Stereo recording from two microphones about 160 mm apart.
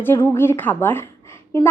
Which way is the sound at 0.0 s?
15° left (ahead or behind).